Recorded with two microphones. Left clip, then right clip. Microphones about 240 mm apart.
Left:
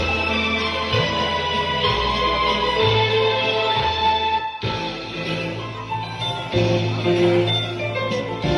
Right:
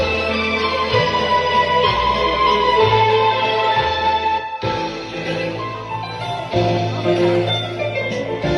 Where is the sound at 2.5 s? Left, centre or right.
Right.